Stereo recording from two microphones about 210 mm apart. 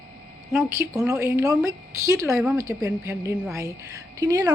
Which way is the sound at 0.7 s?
15° right (ahead or behind).